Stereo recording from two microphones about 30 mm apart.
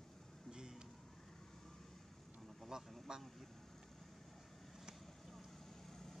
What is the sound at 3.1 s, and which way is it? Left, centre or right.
Speech, right.